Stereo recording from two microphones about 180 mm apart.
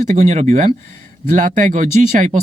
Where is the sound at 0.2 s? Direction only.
35° right (ahead or behind).